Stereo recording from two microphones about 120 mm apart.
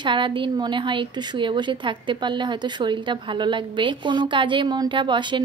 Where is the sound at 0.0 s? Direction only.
45° right (ahead or behind).